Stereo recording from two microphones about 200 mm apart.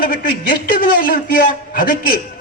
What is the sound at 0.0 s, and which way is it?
A man's voice, 45° left (ahead or behind).